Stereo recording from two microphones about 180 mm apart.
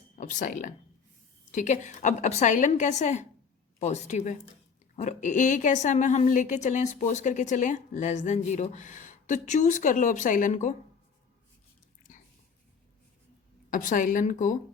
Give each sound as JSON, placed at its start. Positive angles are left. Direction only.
{"t": 0.2, "sound": "a woman's voice", "side_deg": 45}
{"t": 12.1, "sound": "whispering", "side_deg": 45}
{"t": 13.7, "sound": "a woman's voice", "side_deg": 45}